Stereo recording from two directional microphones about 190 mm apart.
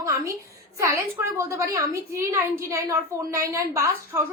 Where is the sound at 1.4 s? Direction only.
15° right (ahead or behind).